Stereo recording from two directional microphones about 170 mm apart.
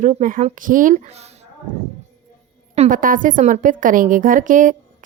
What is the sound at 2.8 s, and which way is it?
A woman's voice, 50° right (ahead or behind).